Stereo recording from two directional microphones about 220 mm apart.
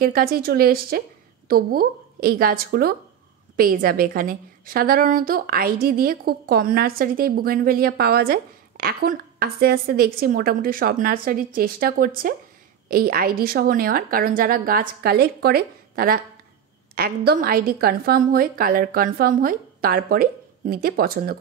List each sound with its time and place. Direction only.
0.0 s a woman's voice: 40° right (ahead or behind)